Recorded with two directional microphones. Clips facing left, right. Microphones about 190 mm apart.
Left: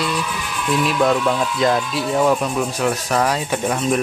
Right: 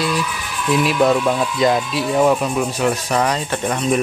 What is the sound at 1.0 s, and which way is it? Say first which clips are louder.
Speech: right 1 dB; 5° right (ahead or behind).